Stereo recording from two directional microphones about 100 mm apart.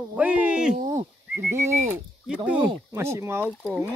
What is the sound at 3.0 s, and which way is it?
Speech, 25° right (ahead or behind).